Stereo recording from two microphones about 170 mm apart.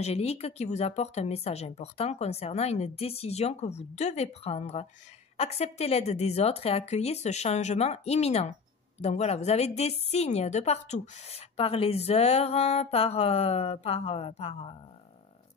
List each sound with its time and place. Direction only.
0.0 s a woman's voice: 35° left (ahead or behind)